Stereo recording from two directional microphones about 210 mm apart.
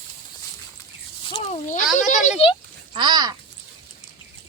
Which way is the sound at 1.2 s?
30° left (ahead or behind).